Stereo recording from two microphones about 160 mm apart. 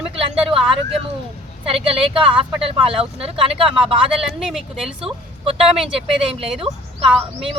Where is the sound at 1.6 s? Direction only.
35° right (ahead or behind).